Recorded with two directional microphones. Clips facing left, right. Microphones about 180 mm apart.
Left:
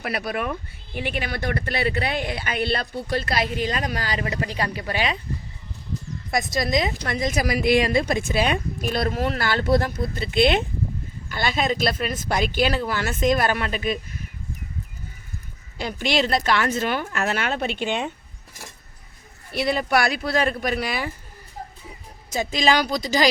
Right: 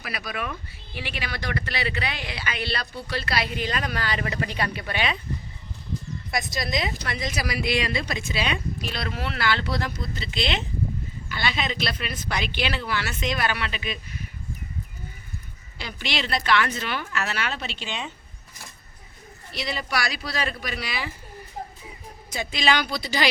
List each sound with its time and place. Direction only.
0.0 s a woman's voice: 55° left (ahead or behind); by 5.1 s 35° left (ahead or behind)
6.3 s a woman's voice: 45° left (ahead or behind)
15.8 s a woman's voice: 45° left (ahead or behind)
19.5 s a woman's voice: 55° left (ahead or behind)
22.3 s speech: 40° left (ahead or behind)